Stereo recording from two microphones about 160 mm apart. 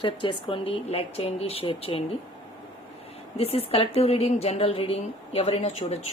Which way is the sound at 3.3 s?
40° left (ahead or behind).